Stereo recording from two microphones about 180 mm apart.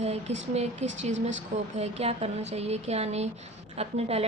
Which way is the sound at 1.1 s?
90° right.